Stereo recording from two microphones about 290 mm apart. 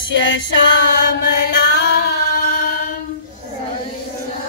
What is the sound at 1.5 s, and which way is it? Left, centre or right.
Music, left.